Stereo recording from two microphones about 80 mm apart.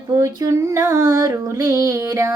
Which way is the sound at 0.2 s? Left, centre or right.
Right.